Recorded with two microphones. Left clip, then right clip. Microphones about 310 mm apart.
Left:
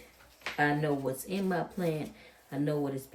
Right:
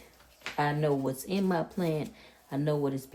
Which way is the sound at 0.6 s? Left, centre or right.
Centre.